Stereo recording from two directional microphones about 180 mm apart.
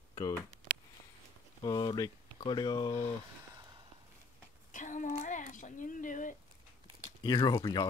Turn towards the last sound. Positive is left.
turn(degrees=25)  # may be behind; listen again after turning